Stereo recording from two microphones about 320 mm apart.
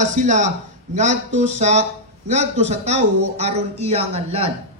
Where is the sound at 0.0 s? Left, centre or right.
Right.